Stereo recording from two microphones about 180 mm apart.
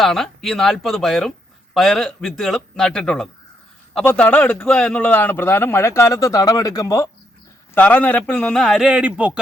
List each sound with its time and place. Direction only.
0.0 s a man's voice: centre (ahead or behind)